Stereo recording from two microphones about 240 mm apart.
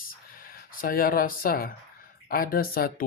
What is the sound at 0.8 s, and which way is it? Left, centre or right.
Speech, left.